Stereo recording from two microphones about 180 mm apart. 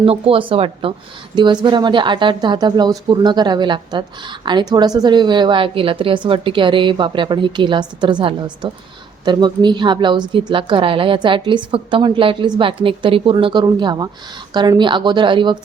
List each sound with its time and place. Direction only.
0.0 s a woman's voice: 30° right (ahead or behind)